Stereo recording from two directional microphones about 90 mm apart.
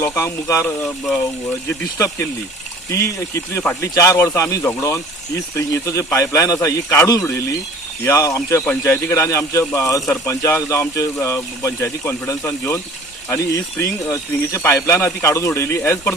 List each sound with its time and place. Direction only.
0.0 s speech: 30° left (ahead or behind)
0.8 s speech: 5° left (ahead or behind)
2.9 s speech: 35° left (ahead or behind)